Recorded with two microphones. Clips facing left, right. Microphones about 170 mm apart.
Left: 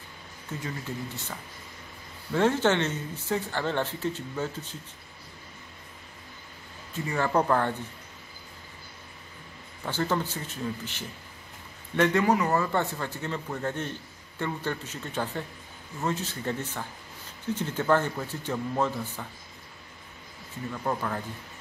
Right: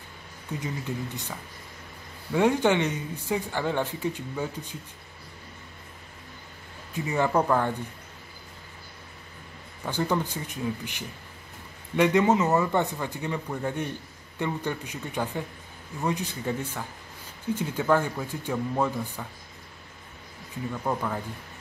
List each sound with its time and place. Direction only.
0.6 s speech: 20° right (ahead or behind)
2.3 s speech: 15° right (ahead or behind)
6.9 s speech: 15° right (ahead or behind)
9.8 s speech: 15° right (ahead or behind)
20.8 s speech: 10° right (ahead or behind)